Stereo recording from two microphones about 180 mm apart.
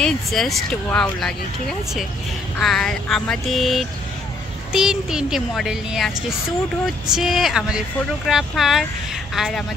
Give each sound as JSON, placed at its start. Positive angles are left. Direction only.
{"t": 0.0, "sound": "speech", "side_deg": 0}